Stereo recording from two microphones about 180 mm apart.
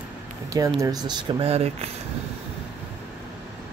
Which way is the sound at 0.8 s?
25° right (ahead or behind).